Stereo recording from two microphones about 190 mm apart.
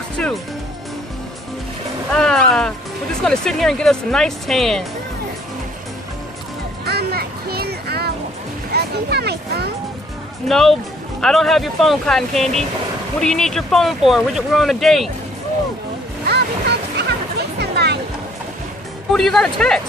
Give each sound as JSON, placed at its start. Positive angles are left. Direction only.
{"t": 0.2, "sound": "music", "side_deg": 5}
{"t": 2.1, "sound": "music", "side_deg": 5}
{"t": 3.2, "sound": "speech", "side_deg": 5}
{"t": 6.9, "sound": "a sound", "side_deg": -55}
{"t": 10.5, "sound": "speech", "side_deg": 0}
{"t": 16.3, "sound": "music", "side_deg": -60}
{"t": 19.1, "sound": "speech", "side_deg": 0}